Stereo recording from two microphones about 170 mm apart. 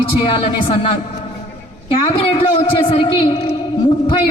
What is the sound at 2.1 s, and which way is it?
A man's voice, 30° left (ahead or behind).